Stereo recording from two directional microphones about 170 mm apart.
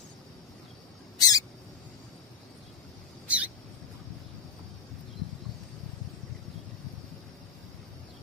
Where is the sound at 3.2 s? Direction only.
10° right (ahead or behind).